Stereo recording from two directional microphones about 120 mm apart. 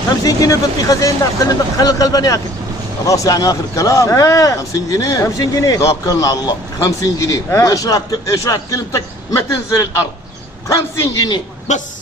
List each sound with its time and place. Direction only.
0.2 s a man's voice: 30° left (ahead or behind)
11.7 s speech: 80° left